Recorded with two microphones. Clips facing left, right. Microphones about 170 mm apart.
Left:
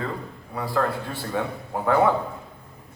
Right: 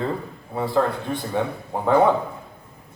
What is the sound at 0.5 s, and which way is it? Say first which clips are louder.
A man's voice: right 3 dB; 25° right (ahead or behind).